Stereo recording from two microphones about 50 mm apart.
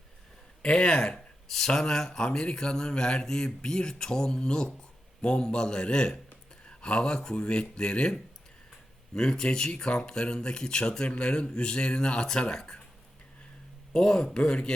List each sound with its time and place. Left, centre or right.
0.6 s speech: centre
9.1 s speech: centre
13.9 s speech: centre